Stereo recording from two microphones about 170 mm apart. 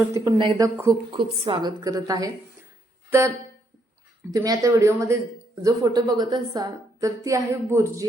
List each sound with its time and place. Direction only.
0.1 s a woman's voice: 25° right (ahead or behind)
3.1 s music: 15° right (ahead or behind)
4.3 s a woman's voice: 20° right (ahead or behind)